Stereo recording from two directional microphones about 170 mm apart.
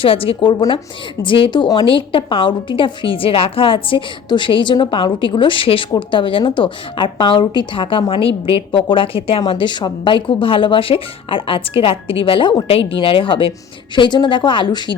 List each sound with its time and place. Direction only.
0.0 s a woman's voice: 35° left (ahead or behind)